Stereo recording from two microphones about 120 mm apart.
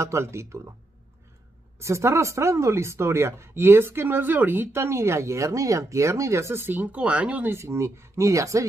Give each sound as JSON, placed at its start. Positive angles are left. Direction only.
{"t": 0.0, "sound": "speech", "side_deg": -25}
{"t": 1.8, "sound": "speech", "side_deg": -25}
{"t": 7.5, "sound": "speech", "side_deg": -25}